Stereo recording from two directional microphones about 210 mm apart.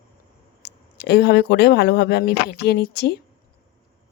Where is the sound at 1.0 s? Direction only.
50° left (ahead or behind).